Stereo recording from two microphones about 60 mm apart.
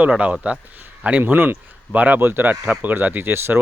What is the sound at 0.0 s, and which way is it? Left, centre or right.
Speech, right.